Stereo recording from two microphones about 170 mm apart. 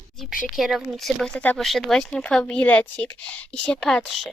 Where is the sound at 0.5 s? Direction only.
Centre (ahead or behind).